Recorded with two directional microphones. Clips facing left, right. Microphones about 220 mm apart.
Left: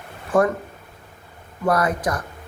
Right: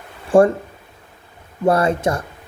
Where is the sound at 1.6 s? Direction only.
25° right (ahead or behind).